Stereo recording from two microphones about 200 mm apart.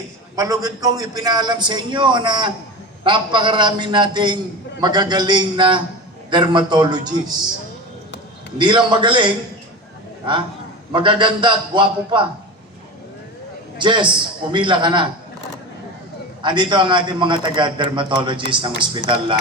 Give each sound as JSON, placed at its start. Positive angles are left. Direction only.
{"t": 0.3, "sound": "a man's voice", "side_deg": -15}
{"t": 8.5, "sound": "a man's voice", "side_deg": -25}
{"t": 10.9, "sound": "a man's voice", "side_deg": -25}
{"t": 13.7, "sound": "a man's voice", "side_deg": -25}
{"t": 16.4, "sound": "a man's voice", "side_deg": -25}